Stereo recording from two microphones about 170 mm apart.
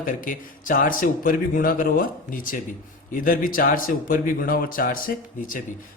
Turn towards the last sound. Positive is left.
turn(degrees=55)  # may be behind; listen again after turning